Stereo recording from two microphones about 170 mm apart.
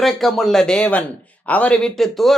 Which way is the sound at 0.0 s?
Centre (ahead or behind).